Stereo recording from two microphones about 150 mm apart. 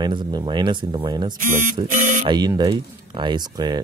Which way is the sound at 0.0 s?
30° right (ahead or behind).